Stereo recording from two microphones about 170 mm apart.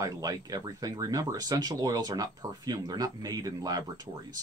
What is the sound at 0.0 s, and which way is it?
Speech, 20° right (ahead or behind).